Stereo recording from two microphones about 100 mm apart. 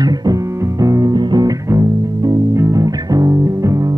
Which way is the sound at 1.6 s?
30° right (ahead or behind).